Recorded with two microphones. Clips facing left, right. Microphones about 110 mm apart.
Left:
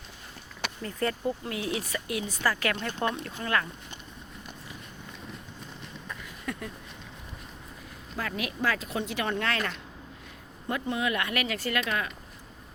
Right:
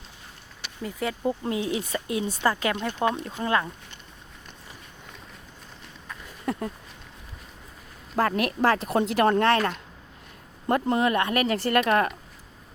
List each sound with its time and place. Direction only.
0.8 s speech: 10° right (ahead or behind)
1.2 s speech: 25° right (ahead or behind)
6.4 s a sound: 35° right (ahead or behind)
8.1 s speech: 50° right (ahead or behind); by 11.7 s 35° right (ahead or behind)
11.7 s speech: 50° right (ahead or behind)